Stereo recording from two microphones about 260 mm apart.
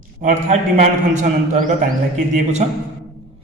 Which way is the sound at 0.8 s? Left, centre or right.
Right.